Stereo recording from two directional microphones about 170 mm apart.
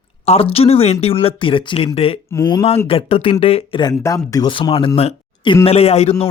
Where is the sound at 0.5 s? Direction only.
35° left (ahead or behind).